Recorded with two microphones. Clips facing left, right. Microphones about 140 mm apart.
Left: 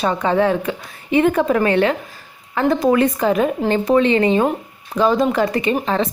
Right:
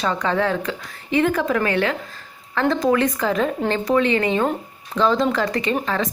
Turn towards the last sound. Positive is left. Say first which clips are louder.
# left 4 dB
turn(degrees=25)  # may be behind; listen again after turning